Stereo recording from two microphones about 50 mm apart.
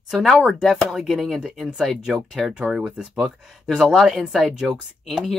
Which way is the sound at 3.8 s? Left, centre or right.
Centre.